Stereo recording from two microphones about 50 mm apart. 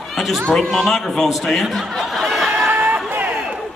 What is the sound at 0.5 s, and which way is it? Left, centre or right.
Speech, centre.